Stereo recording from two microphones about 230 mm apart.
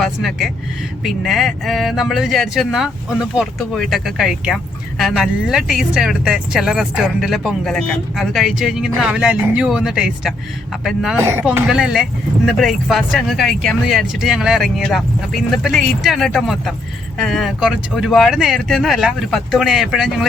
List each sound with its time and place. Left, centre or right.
0.0 s speech: centre